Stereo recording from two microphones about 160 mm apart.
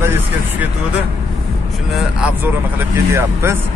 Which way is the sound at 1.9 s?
10° right (ahead or behind).